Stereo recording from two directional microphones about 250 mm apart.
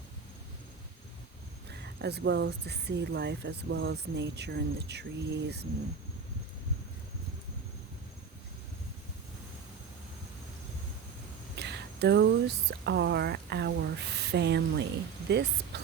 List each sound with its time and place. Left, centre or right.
1.7 s speech: right
11.5 s a sound: right
12.8 s speech: right